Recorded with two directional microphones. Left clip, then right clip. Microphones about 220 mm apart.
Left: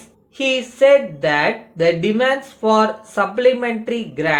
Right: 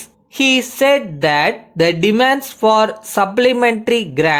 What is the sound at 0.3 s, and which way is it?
Speech, 50° right (ahead or behind).